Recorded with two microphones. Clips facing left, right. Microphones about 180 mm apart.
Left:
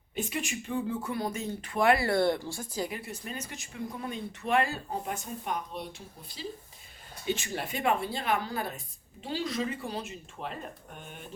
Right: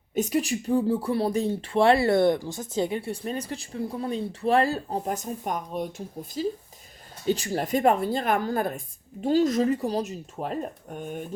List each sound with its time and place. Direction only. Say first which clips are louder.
0.1 s speech: right 9 dB; 40° right (ahead or behind)